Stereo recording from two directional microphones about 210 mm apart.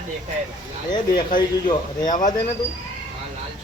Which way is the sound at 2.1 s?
40° left (ahead or behind).